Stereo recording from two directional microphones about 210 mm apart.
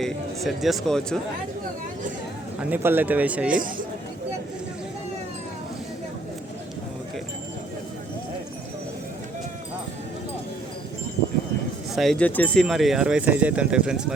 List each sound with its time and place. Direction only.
0.0 s speech: centre (ahead or behind)
2.6 s speech: 10° right (ahead or behind)
3.5 s speech: 40° right (ahead or behind)
11.9 s speech: 5° left (ahead or behind)